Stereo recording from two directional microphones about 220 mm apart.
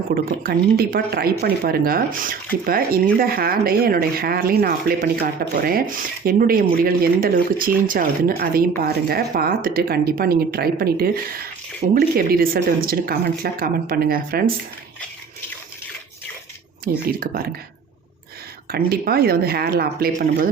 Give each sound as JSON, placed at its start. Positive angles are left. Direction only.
{"t": 0.1, "sound": "speech", "side_deg": -45}
{"t": 16.8, "sound": "speech", "side_deg": -40}
{"t": 18.7, "sound": "speech", "side_deg": -45}